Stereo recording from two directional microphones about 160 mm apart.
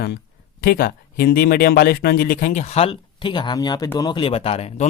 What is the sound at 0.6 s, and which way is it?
Speech, 70° left (ahead or behind).